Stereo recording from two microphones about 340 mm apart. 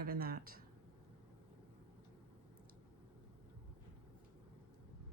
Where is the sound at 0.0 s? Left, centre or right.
Right.